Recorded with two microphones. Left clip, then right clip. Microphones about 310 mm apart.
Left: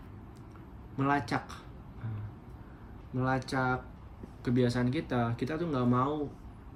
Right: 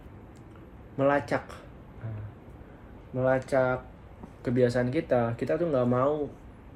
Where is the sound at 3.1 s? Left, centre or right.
Right.